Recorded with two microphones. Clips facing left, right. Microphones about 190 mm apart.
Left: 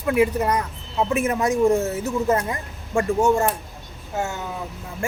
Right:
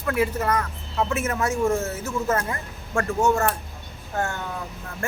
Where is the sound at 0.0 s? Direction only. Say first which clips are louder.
Left 4 dB; 15° left (ahead or behind).